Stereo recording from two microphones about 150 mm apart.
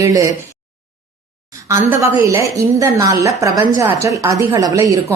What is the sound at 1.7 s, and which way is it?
A woman's voice, 15° right (ahead or behind).